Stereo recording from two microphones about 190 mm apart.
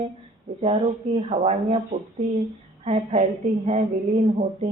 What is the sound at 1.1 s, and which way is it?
Speech, 30° right (ahead or behind).